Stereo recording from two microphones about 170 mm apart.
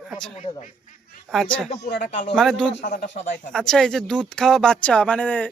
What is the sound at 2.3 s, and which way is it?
Speech, 5° left (ahead or behind).